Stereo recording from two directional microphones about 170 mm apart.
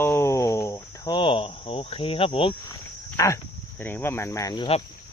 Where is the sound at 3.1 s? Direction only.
20° left (ahead or behind).